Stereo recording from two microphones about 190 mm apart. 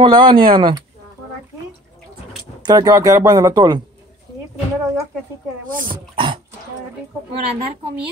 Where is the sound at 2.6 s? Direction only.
20° right (ahead or behind).